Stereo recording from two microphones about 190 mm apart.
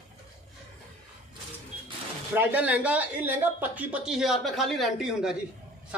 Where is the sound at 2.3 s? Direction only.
10° right (ahead or behind).